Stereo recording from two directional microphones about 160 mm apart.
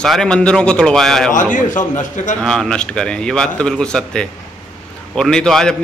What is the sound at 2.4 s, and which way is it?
A man's voice, centre (ahead or behind).